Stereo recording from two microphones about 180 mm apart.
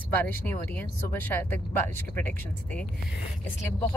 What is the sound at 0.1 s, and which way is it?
Speech, 10° left (ahead or behind).